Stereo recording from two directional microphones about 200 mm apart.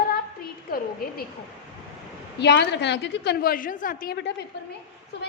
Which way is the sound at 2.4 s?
60° left (ahead or behind).